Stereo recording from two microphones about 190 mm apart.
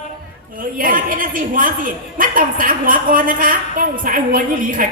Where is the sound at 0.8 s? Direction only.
45° right (ahead or behind).